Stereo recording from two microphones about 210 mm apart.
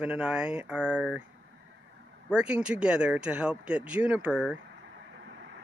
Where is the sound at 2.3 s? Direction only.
5° right (ahead or behind).